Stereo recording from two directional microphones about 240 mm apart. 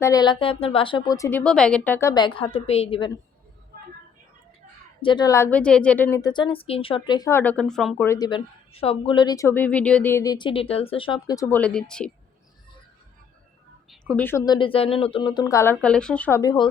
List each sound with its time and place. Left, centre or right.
0.0 s a woman's voice: centre
5.0 s a woman's voice: centre
13.9 s a woman's voice: centre